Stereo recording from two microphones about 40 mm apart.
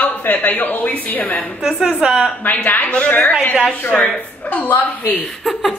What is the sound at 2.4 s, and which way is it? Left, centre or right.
Speech, left.